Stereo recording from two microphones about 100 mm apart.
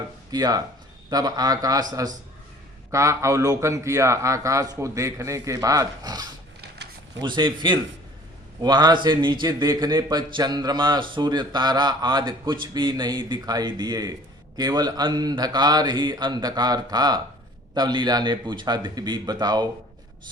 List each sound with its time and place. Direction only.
0.3 s a man's voice: 40° right (ahead or behind)